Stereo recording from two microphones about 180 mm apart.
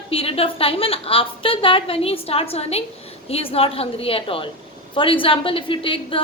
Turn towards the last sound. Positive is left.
turn(degrees=30)  # may be behind; listen again after turning